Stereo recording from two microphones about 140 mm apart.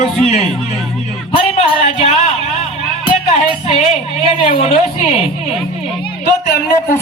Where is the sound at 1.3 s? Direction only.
45° left (ahead or behind).